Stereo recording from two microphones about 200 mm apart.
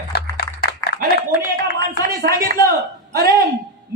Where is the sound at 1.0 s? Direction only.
50° left (ahead or behind).